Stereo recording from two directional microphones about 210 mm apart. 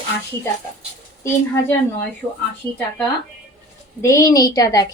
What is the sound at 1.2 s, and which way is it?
Speech, 10° left (ahead or behind).